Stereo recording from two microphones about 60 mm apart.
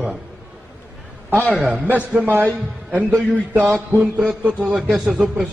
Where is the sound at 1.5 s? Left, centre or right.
Right.